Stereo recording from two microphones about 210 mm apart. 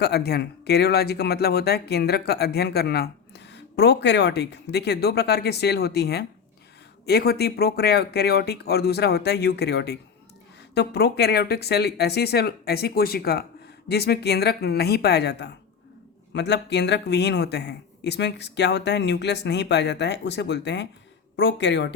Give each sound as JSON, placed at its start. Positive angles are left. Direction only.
{"t": 0.0, "sound": "speech", "side_deg": 50}